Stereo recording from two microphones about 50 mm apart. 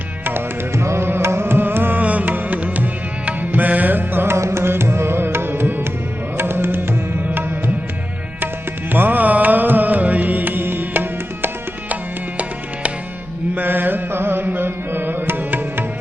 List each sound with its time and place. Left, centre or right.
0.3 s music: right
2.0 s music: right
4.4 s music: right
8.9 s music: right
13.6 s music: right